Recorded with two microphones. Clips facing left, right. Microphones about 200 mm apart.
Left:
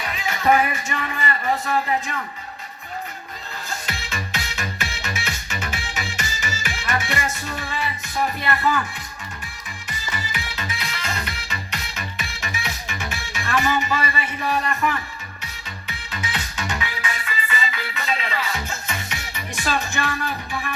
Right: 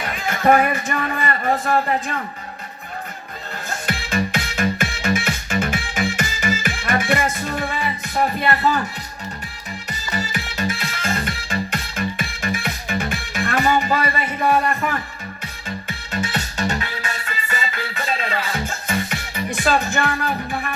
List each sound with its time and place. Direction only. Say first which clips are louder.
0.0 s speech: right 3 dB; 50° right (ahead or behind)
3.7 s music: right 7 dB; 50° right (ahead or behind)
8.4 s a man's voice: right 1 dB; 40° right (ahead or behind)
10.2 s music: right 9 dB; 45° right (ahead or behind)